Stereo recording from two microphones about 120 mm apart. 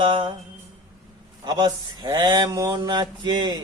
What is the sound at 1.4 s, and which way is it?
Speech, 35° right (ahead or behind).